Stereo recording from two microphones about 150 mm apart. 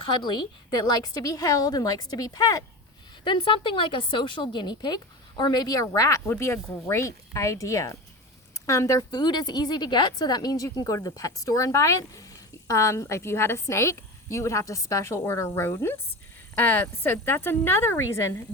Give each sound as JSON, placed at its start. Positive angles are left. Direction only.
{"t": 0.0, "sound": "a woman's voice", "side_deg": 30}